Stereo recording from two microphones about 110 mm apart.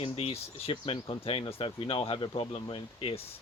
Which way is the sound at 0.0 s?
60° left (ahead or behind).